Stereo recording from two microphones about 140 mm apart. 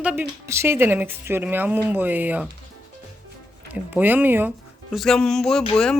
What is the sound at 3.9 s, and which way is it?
Speech, 15° right (ahead or behind).